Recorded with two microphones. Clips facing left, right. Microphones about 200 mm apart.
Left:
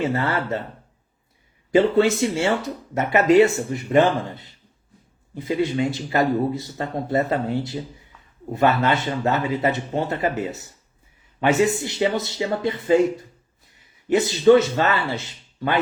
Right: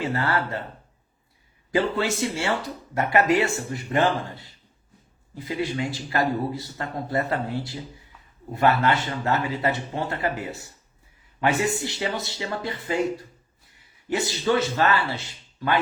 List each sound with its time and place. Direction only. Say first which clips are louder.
0.0 s a man's voice: left 3 dB; 20° left (ahead or behind)
1.7 s a man's voice: left 7 dB; 20° left (ahead or behind)
14.1 s a man's voice: left 9 dB; 20° left (ahead or behind)